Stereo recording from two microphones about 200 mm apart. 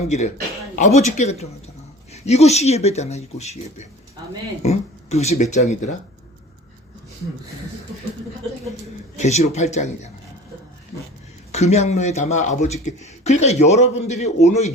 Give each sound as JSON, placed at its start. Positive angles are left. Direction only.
{"t": 0.8, "sound": "speech", "side_deg": 35}
{"t": 9.1, "sound": "speech", "side_deg": 35}
{"t": 11.5, "sound": "speech", "side_deg": 35}